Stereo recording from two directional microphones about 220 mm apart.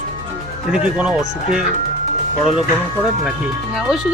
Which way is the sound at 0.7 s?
5° right (ahead or behind).